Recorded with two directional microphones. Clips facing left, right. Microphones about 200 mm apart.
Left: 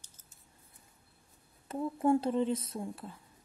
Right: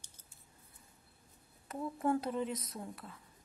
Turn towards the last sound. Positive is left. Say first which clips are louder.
# left 6 dB
turn(degrees=30)  # may be behind; listen again after turning